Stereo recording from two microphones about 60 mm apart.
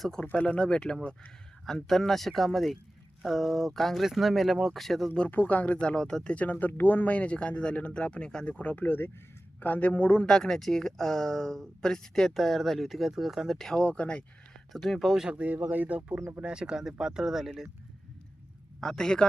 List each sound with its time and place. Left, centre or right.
0.0 s speech: centre
0.3 s speech: left; by 5.1 s centre
5.3 s speech: left
6.3 s speech: left
8.4 s speech: left
10.2 s speech: centre
13.8 s speech: centre
14.7 s speech: centre
15.3 s speech: right
16.4 s speech: centre
18.8 s speech: centre